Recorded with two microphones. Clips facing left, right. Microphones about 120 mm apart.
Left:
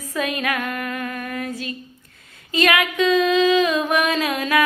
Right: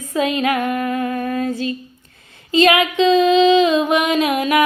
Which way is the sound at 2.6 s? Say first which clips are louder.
Right 5 dB; 25° right (ahead or behind).